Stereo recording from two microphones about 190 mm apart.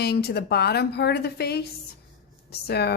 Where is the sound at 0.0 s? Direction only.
55° left (ahead or behind).